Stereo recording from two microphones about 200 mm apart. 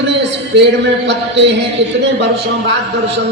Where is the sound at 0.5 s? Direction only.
60° right (ahead or behind).